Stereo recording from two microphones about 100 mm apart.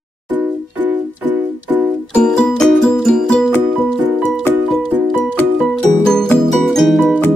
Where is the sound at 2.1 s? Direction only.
10° left (ahead or behind).